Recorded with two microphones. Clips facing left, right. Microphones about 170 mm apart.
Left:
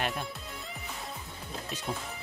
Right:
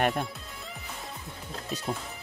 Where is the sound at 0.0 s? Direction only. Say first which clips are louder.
Right 6 dB; 45° right (ahead or behind).